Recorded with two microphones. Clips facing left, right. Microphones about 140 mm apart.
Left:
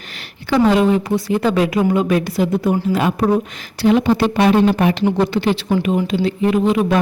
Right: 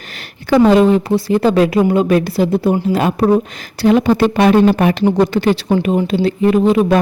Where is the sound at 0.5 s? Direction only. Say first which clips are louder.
Right 4 dB; 40° right (ahead or behind).